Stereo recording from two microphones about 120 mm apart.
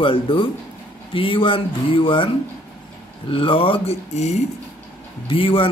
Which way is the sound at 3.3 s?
50° left (ahead or behind).